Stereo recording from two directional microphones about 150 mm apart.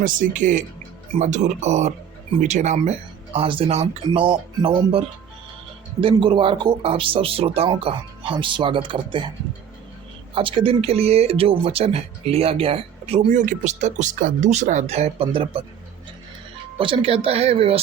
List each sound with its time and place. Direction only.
0.0 s speech: 60° right (ahead or behind)
3.3 s speech: 35° right (ahead or behind)
10.3 s speech: 35° right (ahead or behind)
16.7 s speech: 35° right (ahead or behind)